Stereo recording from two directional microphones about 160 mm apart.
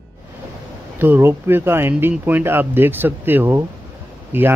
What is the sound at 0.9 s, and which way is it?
Speech, 15° right (ahead or behind).